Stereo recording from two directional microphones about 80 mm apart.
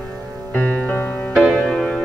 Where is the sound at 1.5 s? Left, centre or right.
Centre.